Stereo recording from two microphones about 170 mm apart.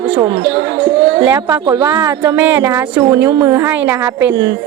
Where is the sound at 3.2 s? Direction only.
25° right (ahead or behind).